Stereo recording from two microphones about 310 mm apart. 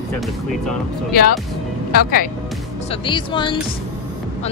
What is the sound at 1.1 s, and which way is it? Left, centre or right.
A woman's voice, left.